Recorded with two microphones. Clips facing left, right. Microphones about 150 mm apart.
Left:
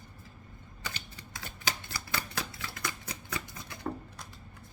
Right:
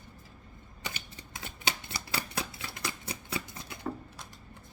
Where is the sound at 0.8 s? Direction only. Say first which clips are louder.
Right 1 dB; 20° right (ahead or behind).